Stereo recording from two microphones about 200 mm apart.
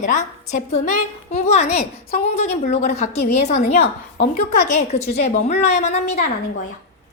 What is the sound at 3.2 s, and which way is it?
Speech, 50° left (ahead or behind).